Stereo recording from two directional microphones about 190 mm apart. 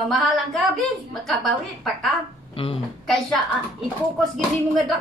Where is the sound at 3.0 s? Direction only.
Centre (ahead or behind).